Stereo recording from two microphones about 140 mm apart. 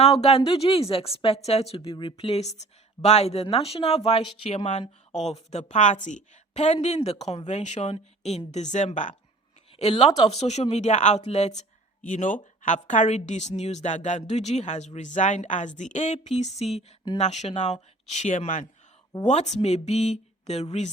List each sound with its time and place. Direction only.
0.0 s a woman's voice: 45° left (ahead or behind)
9.7 s a woman's voice: 50° left (ahead or behind)
12.0 s a woman's voice: 65° left (ahead or behind); by 20.9 s 50° left (ahead or behind)